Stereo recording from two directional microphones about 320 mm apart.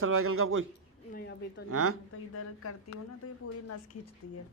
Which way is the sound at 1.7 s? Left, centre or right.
Right.